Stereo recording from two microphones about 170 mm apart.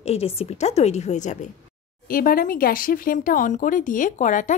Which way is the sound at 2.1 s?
55° left (ahead or behind).